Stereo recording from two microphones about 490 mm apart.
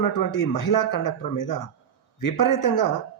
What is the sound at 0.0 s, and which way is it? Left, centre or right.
A man's voice, left.